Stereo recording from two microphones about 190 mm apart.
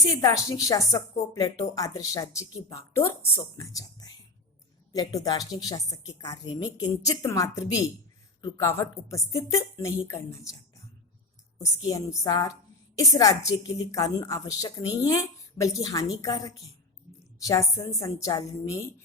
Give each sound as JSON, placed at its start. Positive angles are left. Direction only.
{"t": 0.2, "sound": "a woman's voice", "side_deg": 15}
{"t": 11.6, "sound": "a woman's voice", "side_deg": 20}